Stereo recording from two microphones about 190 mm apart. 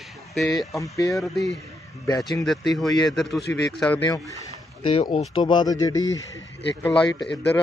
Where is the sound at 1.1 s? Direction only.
Centre (ahead or behind).